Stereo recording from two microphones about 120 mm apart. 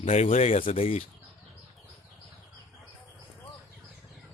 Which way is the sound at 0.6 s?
50° left (ahead or behind).